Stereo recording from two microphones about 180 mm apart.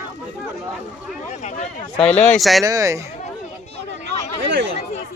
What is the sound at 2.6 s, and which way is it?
Speech, 20° right (ahead or behind).